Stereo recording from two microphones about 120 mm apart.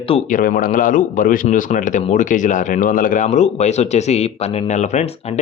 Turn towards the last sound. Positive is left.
turn(degrees=60)  # may be behind; listen again after turning